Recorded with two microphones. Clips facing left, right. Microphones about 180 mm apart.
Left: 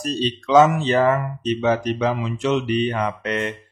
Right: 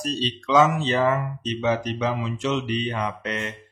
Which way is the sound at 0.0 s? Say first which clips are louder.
Left 4 dB; 50° left (ahead or behind).